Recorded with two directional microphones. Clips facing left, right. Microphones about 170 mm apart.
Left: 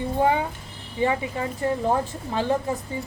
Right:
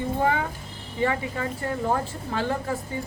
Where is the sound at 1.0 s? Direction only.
20° left (ahead or behind).